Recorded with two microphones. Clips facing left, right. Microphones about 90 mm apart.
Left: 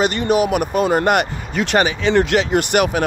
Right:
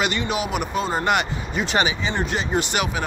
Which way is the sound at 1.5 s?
70° left (ahead or behind).